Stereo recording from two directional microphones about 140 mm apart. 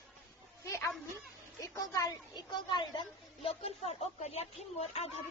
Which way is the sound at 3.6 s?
50° left (ahead or behind).